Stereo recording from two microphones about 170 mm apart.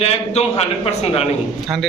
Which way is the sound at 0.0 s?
35° left (ahead or behind).